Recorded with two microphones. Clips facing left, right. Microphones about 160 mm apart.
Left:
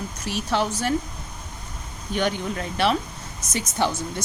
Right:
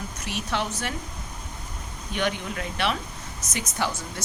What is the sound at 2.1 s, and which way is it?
Speech, 35° left (ahead or behind).